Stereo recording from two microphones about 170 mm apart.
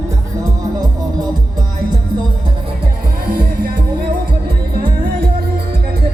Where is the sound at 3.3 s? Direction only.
60° right (ahead or behind).